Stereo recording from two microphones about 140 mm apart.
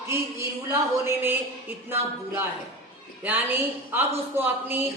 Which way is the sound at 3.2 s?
15° right (ahead or behind).